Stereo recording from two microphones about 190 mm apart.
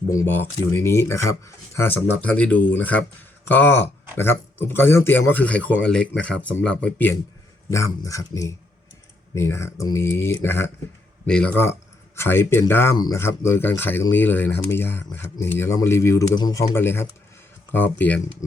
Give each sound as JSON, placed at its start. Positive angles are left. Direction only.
{"t": 0.1, "sound": "speech", "side_deg": 15}